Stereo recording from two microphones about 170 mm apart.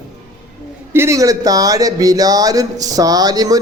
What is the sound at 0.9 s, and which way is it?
Speech, 15° right (ahead or behind).